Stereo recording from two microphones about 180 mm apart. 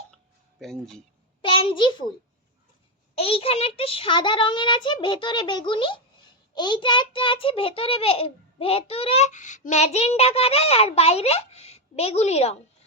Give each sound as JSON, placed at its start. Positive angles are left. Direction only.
{"t": 0.6, "sound": "speech", "side_deg": 0}
{"t": 1.4, "sound": "a child's voice", "side_deg": 25}
{"t": 3.2, "sound": "a child's voice", "side_deg": 30}